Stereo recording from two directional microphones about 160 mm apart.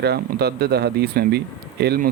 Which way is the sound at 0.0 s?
90° right.